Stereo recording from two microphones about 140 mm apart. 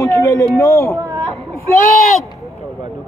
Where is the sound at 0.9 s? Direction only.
20° right (ahead or behind).